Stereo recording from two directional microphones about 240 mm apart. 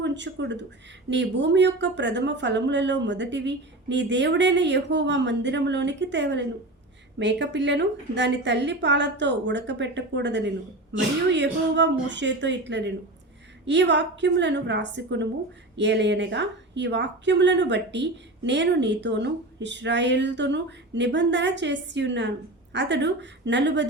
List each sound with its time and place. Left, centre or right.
0.0 s a woman's voice: right